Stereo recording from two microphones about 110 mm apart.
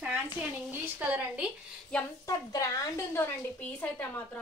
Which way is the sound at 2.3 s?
30° left (ahead or behind).